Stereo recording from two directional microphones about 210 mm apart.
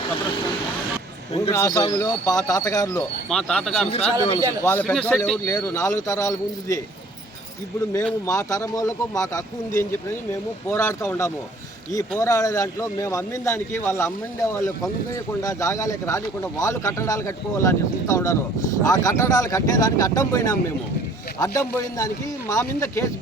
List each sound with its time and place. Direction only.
1.5 s speech: 15° left (ahead or behind)
3.2 s speech: 5° left (ahead or behind)
3.8 s speech: 30° left (ahead or behind)
4.6 s speech: 10° left (ahead or behind)
7.9 s speech: 15° left (ahead or behind)